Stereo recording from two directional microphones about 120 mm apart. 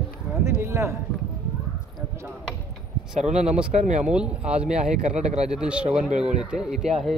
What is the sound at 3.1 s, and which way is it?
Speech, 75° right (ahead or behind).